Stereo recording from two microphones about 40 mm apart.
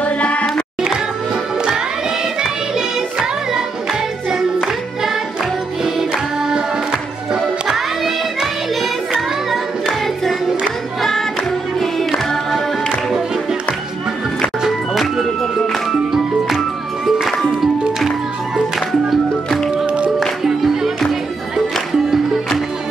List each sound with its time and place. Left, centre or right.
0.0 s music: left
2.7 s music: centre
7.6 s music: centre
9.5 s music: centre
14.7 s music: centre
20.4 s music: centre
21.9 s music: centre